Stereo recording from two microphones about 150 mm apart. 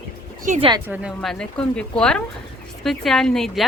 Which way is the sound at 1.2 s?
5° left (ahead or behind).